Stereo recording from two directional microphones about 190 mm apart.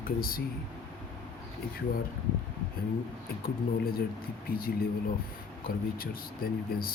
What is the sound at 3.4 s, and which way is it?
Speech, 50° left (ahead or behind).